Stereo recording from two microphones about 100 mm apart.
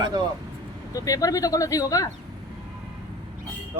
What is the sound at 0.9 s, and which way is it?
Speech, 35° left (ahead or behind).